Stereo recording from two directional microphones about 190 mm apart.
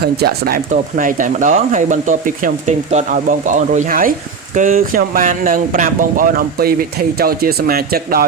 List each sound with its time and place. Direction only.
0.0 s speech: 55° right (ahead or behind)